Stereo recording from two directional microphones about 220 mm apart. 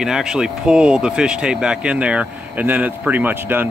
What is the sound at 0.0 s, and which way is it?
Speech, centre (ahead or behind).